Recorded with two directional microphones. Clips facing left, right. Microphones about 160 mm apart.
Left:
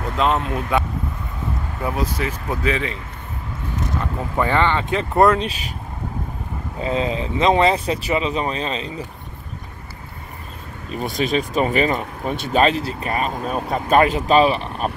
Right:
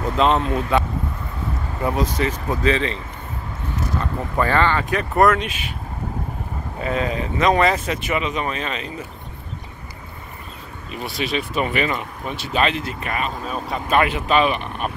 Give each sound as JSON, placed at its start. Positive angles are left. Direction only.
{"t": 0.2, "sound": "speech", "side_deg": 5}
{"t": 4.4, "sound": "speech", "side_deg": 20}
{"t": 6.8, "sound": "speech", "side_deg": 25}
{"t": 10.9, "sound": "speech", "side_deg": 45}